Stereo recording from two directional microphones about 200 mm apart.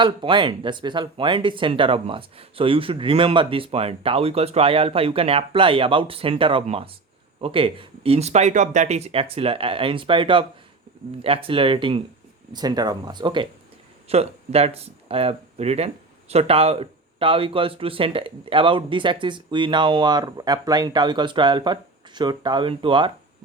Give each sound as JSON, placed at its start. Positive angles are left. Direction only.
{"t": 0.0, "sound": "speech", "side_deg": -25}